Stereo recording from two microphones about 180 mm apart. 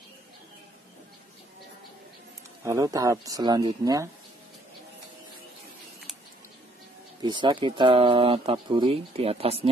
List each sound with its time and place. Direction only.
2.6 s speech: 20° right (ahead or behind)
7.2 s speech: 25° right (ahead or behind)